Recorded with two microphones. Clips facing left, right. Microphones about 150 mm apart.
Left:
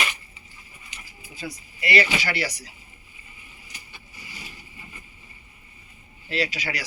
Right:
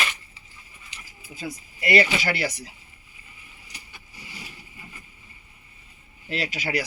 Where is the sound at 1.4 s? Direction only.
45° right (ahead or behind).